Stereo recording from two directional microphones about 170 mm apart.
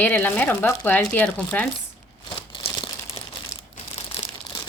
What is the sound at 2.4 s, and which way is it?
Crumpling, 30° left (ahead or behind).